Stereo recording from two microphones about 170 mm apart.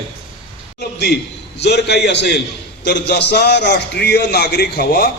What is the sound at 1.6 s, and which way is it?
A man's voice, 80° left.